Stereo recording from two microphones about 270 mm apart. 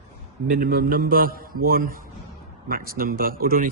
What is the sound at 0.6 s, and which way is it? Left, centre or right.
Speech, right.